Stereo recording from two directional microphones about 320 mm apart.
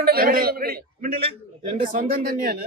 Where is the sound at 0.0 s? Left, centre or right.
Right.